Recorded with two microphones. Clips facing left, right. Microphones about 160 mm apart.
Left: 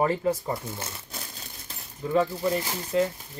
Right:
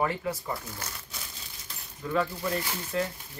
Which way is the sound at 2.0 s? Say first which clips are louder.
Left 5 dB; 20° left (ahead or behind).